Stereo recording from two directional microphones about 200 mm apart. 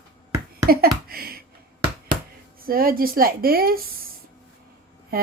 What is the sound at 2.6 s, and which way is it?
A woman's voice, 45° right (ahead or behind).